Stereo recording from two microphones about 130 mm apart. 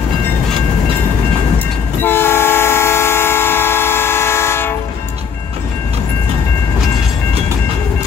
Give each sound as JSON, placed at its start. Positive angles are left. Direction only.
{"t": 2.0, "sound": "train", "side_deg": 15}